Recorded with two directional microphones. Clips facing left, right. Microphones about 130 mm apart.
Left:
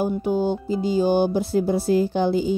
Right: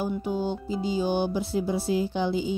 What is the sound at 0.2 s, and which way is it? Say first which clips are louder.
Speech: left 6 dB; 50° left (ahead or behind).